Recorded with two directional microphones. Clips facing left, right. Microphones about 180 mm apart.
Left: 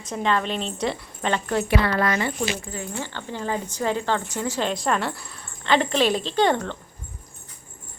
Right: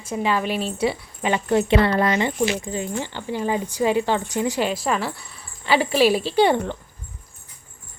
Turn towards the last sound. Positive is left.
turn(degrees=-10)  # may be behind; listen again after turning